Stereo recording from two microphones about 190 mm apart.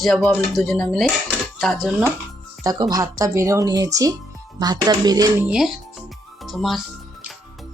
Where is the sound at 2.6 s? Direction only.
20° right (ahead or behind).